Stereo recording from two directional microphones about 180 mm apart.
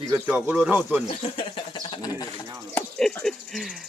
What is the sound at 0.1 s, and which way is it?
Speech, 10° right (ahead or behind).